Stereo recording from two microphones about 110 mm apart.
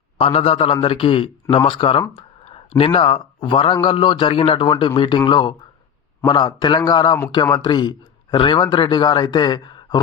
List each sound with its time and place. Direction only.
0.2 s a man's voice: 60° left (ahead or behind); by 10.0 s 45° left (ahead or behind)